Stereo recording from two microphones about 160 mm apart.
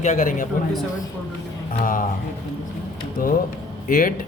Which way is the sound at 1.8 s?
60° left (ahead or behind).